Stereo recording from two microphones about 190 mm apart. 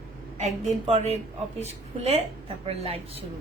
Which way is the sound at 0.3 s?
35° right (ahead or behind).